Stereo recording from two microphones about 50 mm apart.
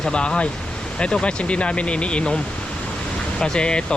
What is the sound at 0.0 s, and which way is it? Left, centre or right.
Speech, centre.